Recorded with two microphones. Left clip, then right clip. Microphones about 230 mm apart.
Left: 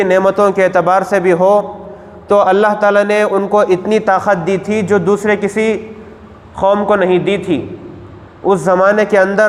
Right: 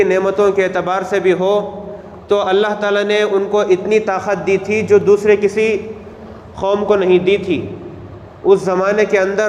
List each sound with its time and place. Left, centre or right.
0.0 s a man's voice: left
6.6 s a man's voice: left
8.5 s a man's voice: left